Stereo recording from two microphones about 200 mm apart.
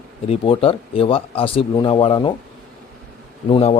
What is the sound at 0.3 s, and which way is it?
Speech, 25° left (ahead or behind).